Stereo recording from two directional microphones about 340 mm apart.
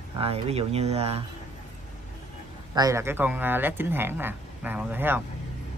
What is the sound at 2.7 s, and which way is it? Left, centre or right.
Speech, centre.